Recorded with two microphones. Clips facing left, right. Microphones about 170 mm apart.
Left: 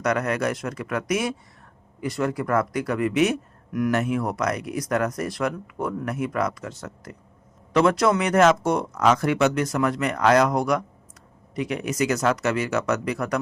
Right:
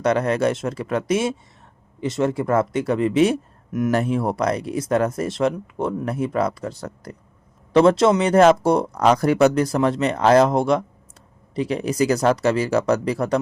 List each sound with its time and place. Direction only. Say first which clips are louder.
0.0 s speech: right 5 dB; 30° right (ahead or behind)